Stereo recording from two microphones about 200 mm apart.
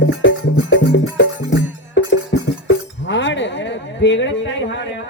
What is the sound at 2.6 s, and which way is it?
Chink, 65° left (ahead or behind).